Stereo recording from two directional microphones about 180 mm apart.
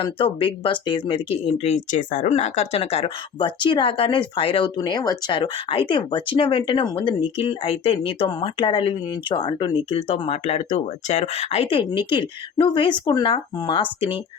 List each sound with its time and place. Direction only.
0.0 s speech: 30° left (ahead or behind)